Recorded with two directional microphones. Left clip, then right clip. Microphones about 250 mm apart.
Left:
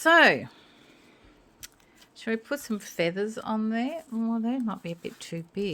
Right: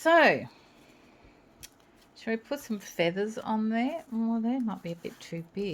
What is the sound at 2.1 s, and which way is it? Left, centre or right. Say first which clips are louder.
Speech: left 2 dB; left.